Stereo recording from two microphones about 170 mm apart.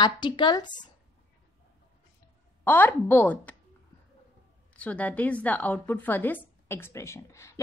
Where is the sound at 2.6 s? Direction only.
10° left (ahead or behind).